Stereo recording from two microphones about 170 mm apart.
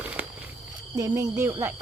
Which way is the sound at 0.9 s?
20° right (ahead or behind).